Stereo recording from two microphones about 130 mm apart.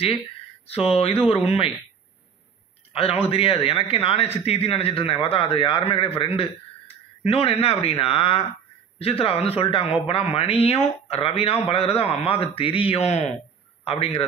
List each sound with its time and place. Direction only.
0.7 s a man's voice: 50° left (ahead or behind)
2.9 s a man's voice: 50° left (ahead or behind)